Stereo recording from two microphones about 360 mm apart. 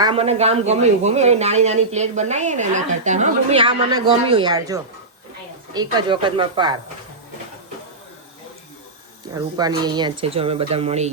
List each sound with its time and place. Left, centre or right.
0.0 s speech: centre
9.3 s speech: centre